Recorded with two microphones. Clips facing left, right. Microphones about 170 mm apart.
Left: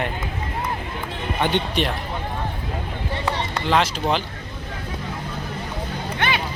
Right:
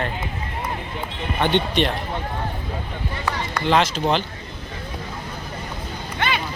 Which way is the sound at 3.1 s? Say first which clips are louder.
Left 2 dB; 30° left (ahead or behind).